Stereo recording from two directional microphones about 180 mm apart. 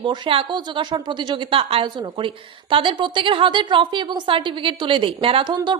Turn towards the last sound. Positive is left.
turn(degrees=-25)  # may be behind; listen again after turning